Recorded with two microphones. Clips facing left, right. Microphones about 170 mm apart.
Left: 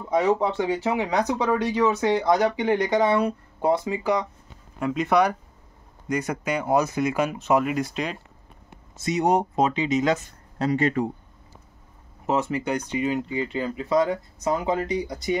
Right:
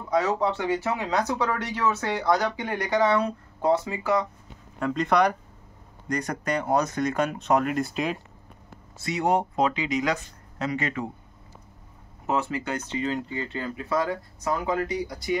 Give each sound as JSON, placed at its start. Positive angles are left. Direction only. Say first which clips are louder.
{"t": 0.1, "sound": "speech", "louder": "left 2 dB", "side_deg": 20}
{"t": 4.7, "sound": "speech", "louder": "left 1 dB", "side_deg": 5}
{"t": 8.6, "sound": "speech", "louder": "left 4 dB", "side_deg": 20}
{"t": 12.3, "sound": "speech", "louder": "left 3 dB", "side_deg": 20}